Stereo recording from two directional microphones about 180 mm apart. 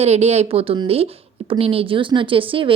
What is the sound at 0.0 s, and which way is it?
Speech, 35° right (ahead or behind).